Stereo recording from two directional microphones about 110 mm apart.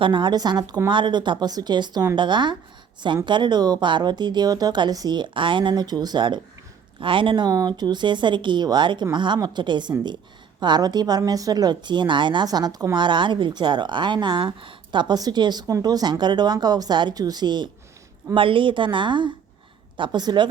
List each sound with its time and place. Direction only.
0.0 s a woman's voice: 45° right (ahead or behind)